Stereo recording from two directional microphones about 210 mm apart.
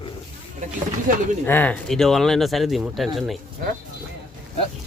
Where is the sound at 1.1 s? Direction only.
40° right (ahead or behind).